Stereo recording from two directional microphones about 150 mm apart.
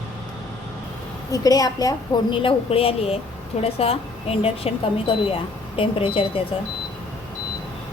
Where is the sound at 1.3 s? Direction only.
25° left (ahead or behind).